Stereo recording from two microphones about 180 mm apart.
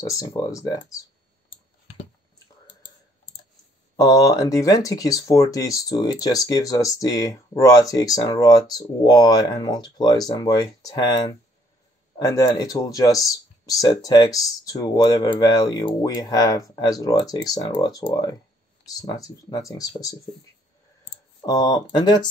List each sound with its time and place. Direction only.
0.0 s speech: 20° left (ahead or behind)
3.9 s speech: 20° left (ahead or behind)
21.4 s speech: 20° left (ahead or behind)